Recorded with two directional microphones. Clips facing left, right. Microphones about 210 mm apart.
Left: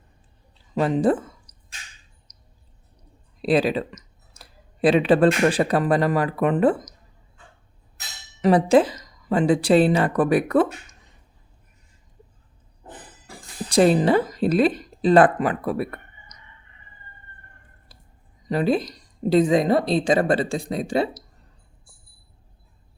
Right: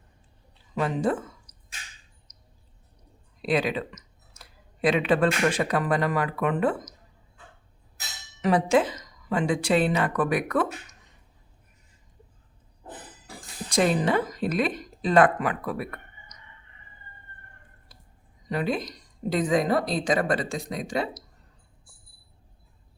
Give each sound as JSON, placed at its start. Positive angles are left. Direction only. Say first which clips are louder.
{"t": 0.8, "sound": "speech", "louder": "left 6 dB", "side_deg": 35}
{"t": 3.4, "sound": "speech", "louder": "left 5 dB", "side_deg": 35}
{"t": 8.4, "sound": "a woman's voice", "louder": "left 5 dB", "side_deg": 35}
{"t": 13.7, "sound": "speech", "louder": "left 6 dB", "side_deg": 35}
{"t": 17.9, "sound": "a sound", "louder": "left 3 dB", "side_deg": 30}
{"t": 18.4, "sound": "a woman's voice", "louder": "left 6 dB", "side_deg": 35}